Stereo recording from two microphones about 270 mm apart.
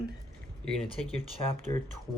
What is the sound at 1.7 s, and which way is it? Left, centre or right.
Speech, centre.